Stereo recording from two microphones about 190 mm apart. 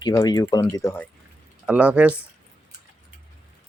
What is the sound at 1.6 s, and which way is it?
Speech, 5° right (ahead or behind).